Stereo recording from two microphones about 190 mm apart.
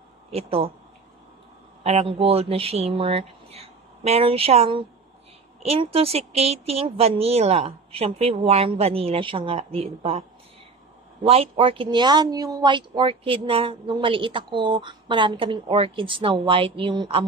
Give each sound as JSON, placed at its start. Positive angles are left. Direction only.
{"t": 0.3, "sound": "speech", "side_deg": -30}
{"t": 1.8, "sound": "speech", "side_deg": -35}
{"t": 11.2, "sound": "speech", "side_deg": -30}